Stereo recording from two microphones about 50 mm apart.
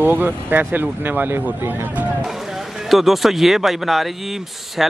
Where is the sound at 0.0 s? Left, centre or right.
Right.